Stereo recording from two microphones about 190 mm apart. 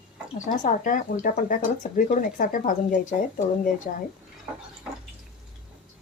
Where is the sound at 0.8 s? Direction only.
45° left (ahead or behind).